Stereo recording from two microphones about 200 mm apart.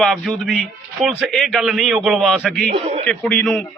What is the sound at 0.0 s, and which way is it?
A man's voice, centre (ahead or behind).